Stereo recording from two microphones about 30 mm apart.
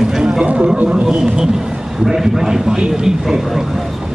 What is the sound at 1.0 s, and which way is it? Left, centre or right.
Speech, right.